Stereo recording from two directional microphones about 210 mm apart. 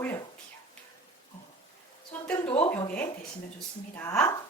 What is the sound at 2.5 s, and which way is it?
Speech, 10° left (ahead or behind).